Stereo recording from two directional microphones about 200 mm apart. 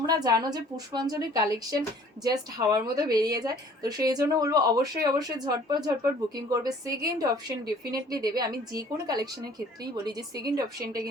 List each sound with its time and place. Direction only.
0.0 s a woman's voice: 20° right (ahead or behind)